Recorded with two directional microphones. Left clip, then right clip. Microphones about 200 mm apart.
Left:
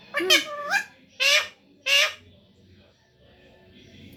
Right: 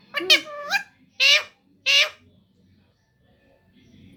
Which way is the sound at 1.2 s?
25° right (ahead or behind).